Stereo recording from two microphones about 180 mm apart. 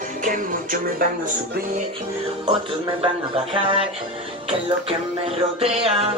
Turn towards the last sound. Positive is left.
turn(degrees=-35)  # may be behind; listen again after turning